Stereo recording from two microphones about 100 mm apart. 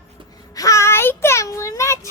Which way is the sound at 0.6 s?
30° left (ahead or behind).